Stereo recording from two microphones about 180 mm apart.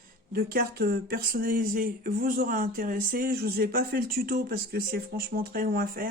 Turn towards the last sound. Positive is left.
turn(degrees=-55)  # may be behind; listen again after turning